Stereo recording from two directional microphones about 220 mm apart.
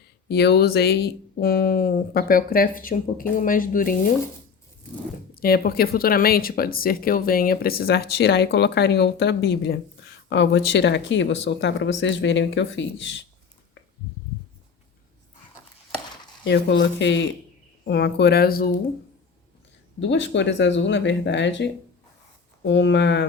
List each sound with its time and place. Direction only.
0.3 s speech: 45° left (ahead or behind)
5.3 s speech: 45° left (ahead or behind)
16.5 s speech: 50° left (ahead or behind)
20.0 s speech: 55° left (ahead or behind)